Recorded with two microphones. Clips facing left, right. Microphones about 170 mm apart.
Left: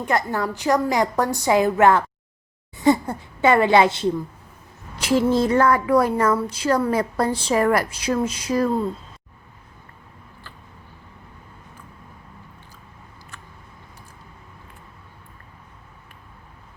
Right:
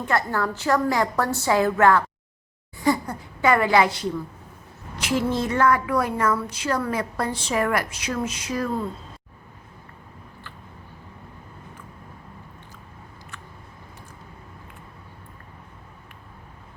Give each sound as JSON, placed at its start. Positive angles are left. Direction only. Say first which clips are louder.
{"t": 0.0, "sound": "a woman's voice", "louder": "left 1 dB", "side_deg": 15}